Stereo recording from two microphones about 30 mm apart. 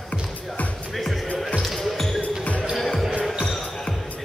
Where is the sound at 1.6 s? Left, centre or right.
Centre.